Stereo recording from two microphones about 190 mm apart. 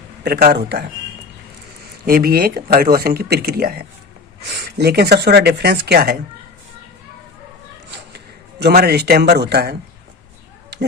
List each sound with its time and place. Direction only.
0.3 s speech: 55° right (ahead or behind)
2.0 s speech: 50° right (ahead or behind)
7.9 s a sound: 60° right (ahead or behind)